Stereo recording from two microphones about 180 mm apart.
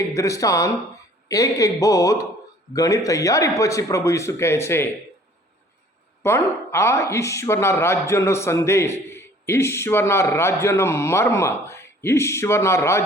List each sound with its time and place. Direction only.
0.1 s speech: 15° left (ahead or behind)
6.2 s speech: 15° left (ahead or behind)